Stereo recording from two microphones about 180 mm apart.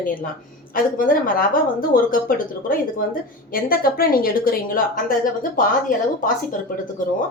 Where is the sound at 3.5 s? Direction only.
55° left (ahead or behind).